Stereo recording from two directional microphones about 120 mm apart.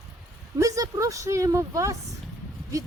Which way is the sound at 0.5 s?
25° right (ahead or behind).